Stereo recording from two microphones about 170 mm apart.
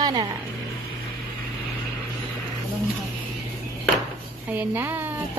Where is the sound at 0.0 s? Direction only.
20° right (ahead or behind).